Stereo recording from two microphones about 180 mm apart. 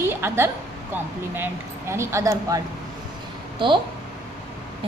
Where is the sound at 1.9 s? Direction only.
15° right (ahead or behind).